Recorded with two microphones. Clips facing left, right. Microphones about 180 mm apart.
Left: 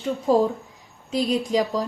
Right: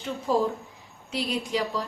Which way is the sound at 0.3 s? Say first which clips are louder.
Left 5 dB; 40° left (ahead or behind).